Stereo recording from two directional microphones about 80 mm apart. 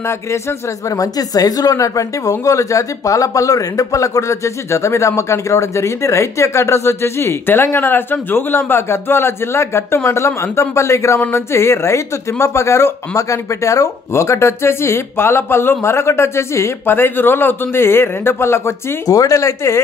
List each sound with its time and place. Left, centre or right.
0.3 s speech: left